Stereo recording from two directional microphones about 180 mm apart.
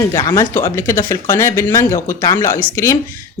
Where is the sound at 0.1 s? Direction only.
15° left (ahead or behind).